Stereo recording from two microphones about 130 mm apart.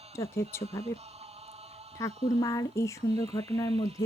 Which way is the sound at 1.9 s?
25° left (ahead or behind).